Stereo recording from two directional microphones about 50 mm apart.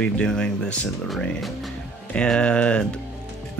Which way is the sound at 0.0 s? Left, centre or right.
Centre.